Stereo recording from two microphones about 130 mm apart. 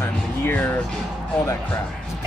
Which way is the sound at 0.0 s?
15° left (ahead or behind).